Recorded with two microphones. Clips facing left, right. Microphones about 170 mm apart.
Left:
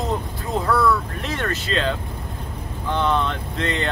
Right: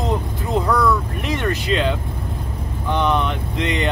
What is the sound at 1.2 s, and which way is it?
Speech, 15° right (ahead or behind).